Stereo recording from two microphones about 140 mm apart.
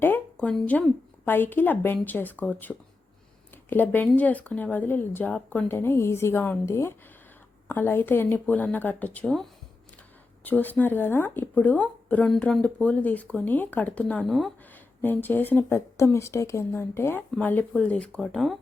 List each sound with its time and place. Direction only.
0.3 s speech: 5° left (ahead or behind)
14.7 s speech: 15° left (ahead or behind)